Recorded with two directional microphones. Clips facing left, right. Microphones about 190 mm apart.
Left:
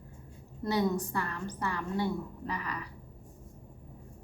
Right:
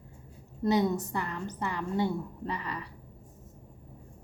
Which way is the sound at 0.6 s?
20° right (ahead or behind).